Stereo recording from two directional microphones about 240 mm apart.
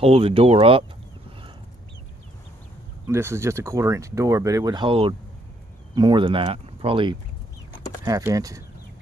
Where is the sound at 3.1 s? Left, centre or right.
Centre.